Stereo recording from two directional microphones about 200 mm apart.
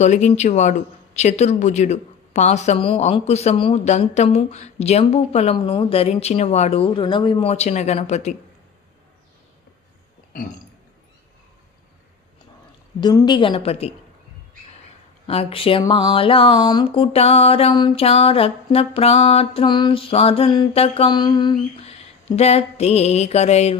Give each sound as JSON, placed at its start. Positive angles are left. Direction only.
{"t": 0.0, "sound": "speech", "side_deg": 35}
{"t": 13.0, "sound": "music", "side_deg": 20}
{"t": 15.3, "sound": "music", "side_deg": 30}